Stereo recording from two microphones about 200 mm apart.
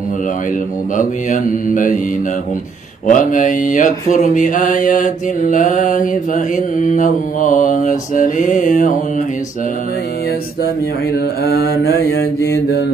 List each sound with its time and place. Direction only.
0.9 s mantra: 40° left (ahead or behind)
3.1 s mantra: 40° left (ahead or behind)
11.4 s mantra: 50° left (ahead or behind)